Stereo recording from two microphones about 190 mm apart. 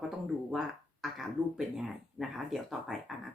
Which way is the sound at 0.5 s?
Centre (ahead or behind).